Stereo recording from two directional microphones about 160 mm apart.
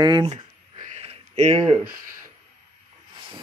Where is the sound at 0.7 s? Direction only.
45° right (ahead or behind).